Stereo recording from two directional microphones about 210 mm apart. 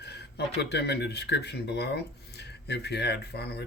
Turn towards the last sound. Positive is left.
turn(degrees=50)  # may be behind; listen again after turning